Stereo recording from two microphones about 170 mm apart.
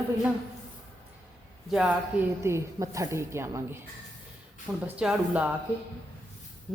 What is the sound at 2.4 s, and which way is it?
A woman's voice, 15° right (ahead or behind).